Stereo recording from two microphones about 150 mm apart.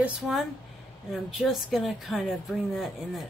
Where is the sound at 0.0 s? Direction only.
Centre (ahead or behind).